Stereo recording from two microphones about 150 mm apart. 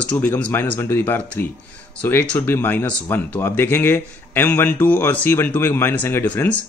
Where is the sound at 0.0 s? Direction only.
10° left (ahead or behind).